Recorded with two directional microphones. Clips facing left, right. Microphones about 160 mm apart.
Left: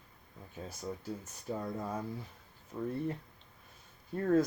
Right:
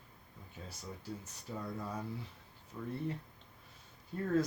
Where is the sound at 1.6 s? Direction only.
45° left (ahead or behind).